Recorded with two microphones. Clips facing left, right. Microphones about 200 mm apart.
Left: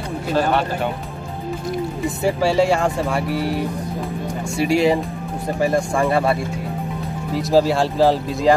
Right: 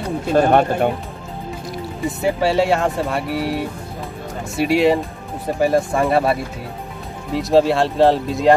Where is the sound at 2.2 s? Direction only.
Centre (ahead or behind).